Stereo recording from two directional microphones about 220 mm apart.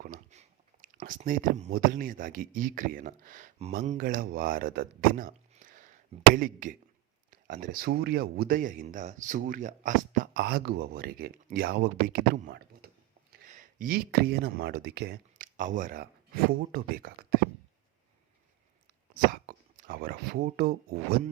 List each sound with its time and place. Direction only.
0.0 s speech: 35° right (ahead or behind)
19.3 s speech: 40° right (ahead or behind)